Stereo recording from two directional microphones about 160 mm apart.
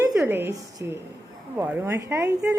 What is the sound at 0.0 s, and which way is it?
A woman's voice, 20° right (ahead or behind).